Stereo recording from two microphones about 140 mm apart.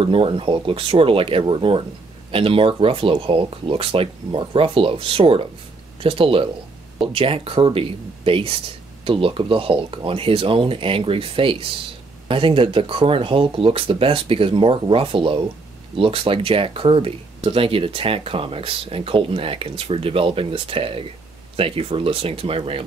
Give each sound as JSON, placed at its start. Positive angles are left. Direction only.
{"t": 0.0, "sound": "speech", "side_deg": -40}